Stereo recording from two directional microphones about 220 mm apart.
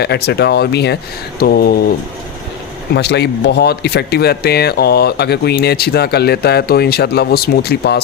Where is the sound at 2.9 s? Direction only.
50° left (ahead or behind).